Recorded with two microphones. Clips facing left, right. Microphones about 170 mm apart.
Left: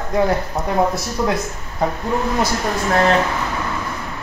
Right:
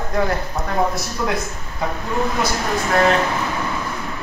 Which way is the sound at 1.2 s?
30° left (ahead or behind).